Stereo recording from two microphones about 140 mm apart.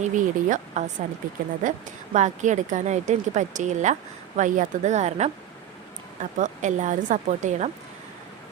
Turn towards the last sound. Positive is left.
turn(degrees=-60)  # may be behind; listen again after turning